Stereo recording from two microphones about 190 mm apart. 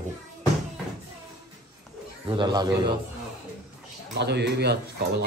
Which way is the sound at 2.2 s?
25° right (ahead or behind).